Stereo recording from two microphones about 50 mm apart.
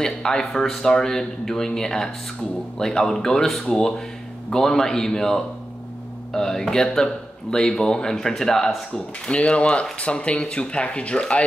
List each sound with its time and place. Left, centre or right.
0.0 s speech: centre
9.3 s speech: left